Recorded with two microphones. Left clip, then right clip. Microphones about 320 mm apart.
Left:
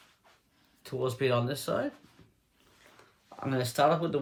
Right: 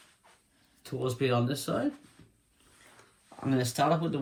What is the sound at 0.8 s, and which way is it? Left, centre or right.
Speech, centre.